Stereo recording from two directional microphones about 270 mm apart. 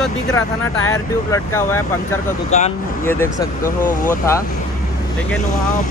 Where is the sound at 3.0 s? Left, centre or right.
Centre.